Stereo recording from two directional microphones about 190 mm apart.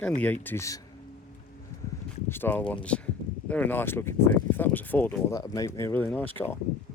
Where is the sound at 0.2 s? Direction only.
10° left (ahead or behind).